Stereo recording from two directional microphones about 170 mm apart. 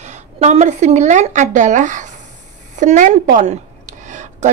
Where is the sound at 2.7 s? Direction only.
45° right (ahead or behind).